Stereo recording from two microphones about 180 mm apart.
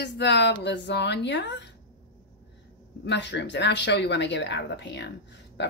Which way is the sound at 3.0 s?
75° left (ahead or behind).